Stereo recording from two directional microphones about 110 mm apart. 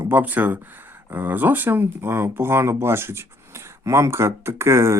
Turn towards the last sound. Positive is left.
turn(degrees=-25)  # may be behind; listen again after turning